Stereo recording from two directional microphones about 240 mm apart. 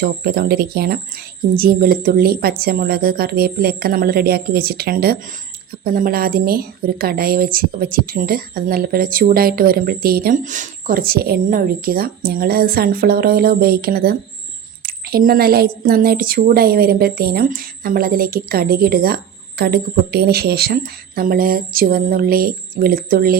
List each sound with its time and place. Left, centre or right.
0.0 s a woman's voice: right